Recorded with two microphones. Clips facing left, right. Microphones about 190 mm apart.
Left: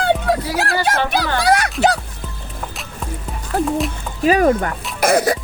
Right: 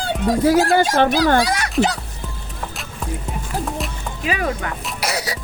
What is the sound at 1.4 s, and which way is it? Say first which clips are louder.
Speech: left 7 dB; 60° left (ahead or behind).